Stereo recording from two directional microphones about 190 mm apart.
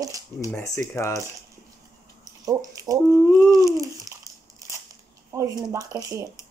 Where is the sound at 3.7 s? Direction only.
15° right (ahead or behind).